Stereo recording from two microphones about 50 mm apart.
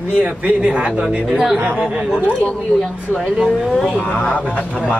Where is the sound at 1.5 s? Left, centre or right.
Right.